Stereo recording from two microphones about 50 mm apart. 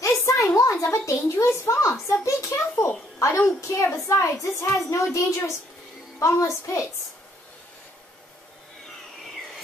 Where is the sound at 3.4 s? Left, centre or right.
Left.